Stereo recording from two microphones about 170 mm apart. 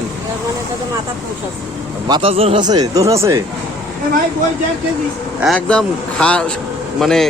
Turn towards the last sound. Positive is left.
turn(degrees=0)  # may be behind; listen again after turning